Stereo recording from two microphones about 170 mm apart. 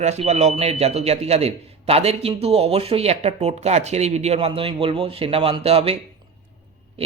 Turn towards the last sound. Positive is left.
turn(degrees=-35)  # may be behind; listen again after turning